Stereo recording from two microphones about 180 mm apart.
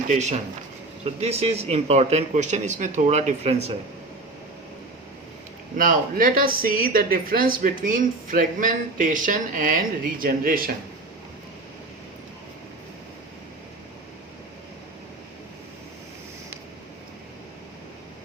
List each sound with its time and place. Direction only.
0.1 s a man's voice: 40° right (ahead or behind)
5.7 s a woman's voice: 50° right (ahead or behind)